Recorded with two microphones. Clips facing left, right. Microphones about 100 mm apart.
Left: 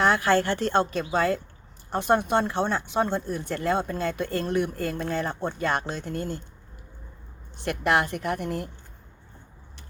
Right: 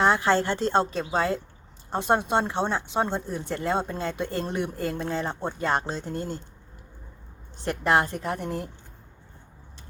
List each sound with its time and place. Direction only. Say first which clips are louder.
0.0 s speech: even; 25° right (ahead or behind)
7.6 s speech: right 1 dB; 30° right (ahead or behind)